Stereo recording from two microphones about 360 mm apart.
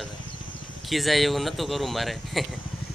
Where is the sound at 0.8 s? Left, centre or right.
Centre.